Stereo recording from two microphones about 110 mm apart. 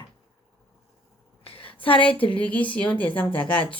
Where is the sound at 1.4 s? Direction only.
55° left (ahead or behind).